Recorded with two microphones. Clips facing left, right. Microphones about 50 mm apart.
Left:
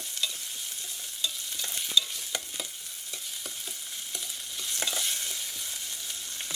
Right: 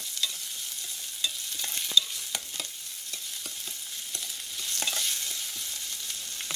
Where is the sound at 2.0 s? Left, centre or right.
Centre.